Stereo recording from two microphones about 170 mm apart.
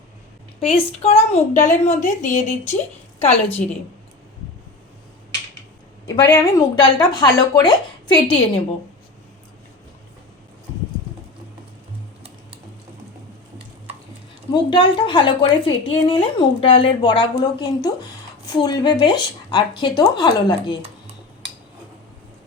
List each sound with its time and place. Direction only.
0.6 s a woman's voice: 35° left (ahead or behind)
6.1 s a woman's voice: 25° left (ahead or behind)
14.5 s a woman's voice: 30° left (ahead or behind)